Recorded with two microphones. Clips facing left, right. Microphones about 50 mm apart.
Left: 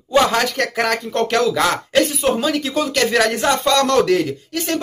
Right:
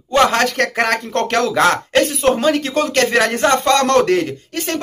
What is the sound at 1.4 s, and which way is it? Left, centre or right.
Speech, right.